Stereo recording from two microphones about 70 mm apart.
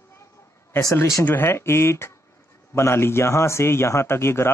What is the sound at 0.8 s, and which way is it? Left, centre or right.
Speech, left.